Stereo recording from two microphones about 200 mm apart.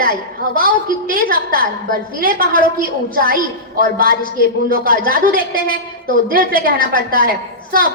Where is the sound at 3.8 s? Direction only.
45° right (ahead or behind).